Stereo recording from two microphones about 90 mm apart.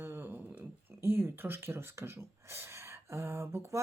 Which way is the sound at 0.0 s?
25° right (ahead or behind).